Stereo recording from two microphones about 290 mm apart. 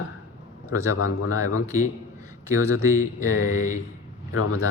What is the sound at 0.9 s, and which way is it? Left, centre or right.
Speech, left.